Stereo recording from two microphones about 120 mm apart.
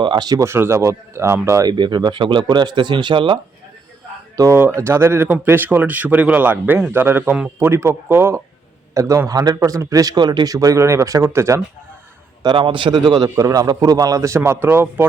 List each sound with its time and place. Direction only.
0.0 s speech: 40° right (ahead or behind)
0.4 s a man's voice: 20° right (ahead or behind)
1.7 s speech: 40° right (ahead or behind)
4.4 s a man's voice: 20° right (ahead or behind)
12.4 s a man's voice: 40° right (ahead or behind); by 15.0 s 20° right (ahead or behind)